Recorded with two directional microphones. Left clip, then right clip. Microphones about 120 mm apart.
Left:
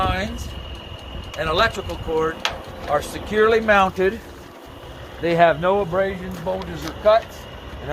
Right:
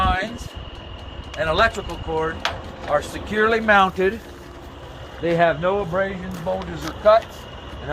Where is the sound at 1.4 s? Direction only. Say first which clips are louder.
Right 1 dB; 50° left (ahead or behind).